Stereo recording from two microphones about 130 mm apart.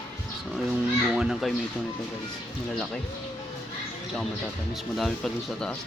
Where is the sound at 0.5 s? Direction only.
Centre (ahead or behind).